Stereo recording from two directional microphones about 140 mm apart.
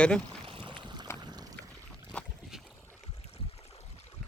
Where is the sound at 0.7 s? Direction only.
35° right (ahead or behind).